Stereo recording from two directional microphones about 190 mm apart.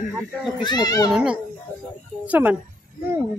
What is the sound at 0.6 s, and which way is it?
Speech, 20° left (ahead or behind).